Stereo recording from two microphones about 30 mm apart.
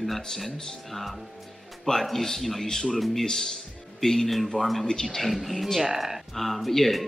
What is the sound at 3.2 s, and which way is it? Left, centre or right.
Speech, centre.